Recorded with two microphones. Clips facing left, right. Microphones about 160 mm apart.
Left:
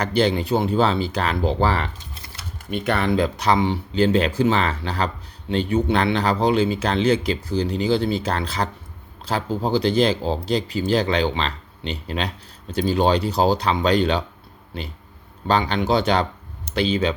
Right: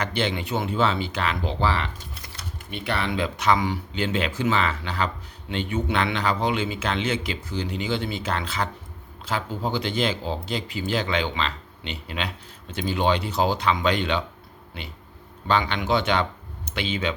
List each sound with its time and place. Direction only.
0.0 s speech: 35° left (ahead or behind)
15.4 s speech: 35° left (ahead or behind)